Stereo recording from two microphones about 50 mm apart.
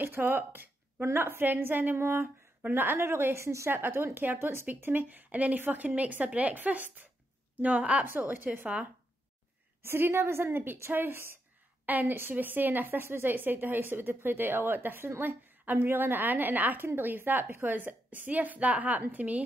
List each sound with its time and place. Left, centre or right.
0.3 s a woman's voice: right
2.0 s a woman's voice: right
2.7 s a woman's voice: right
3.0 s a woman's voice: right
3.7 s a woman's voice: right
4.6 s a woman's voice: right
9.8 s a woman's voice: right
11.8 s a woman's voice: right